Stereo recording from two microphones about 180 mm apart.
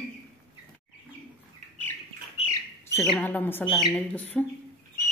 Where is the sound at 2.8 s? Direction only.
10° left (ahead or behind).